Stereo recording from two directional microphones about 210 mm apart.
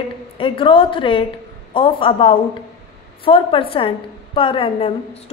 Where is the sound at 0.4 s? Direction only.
25° left (ahead or behind).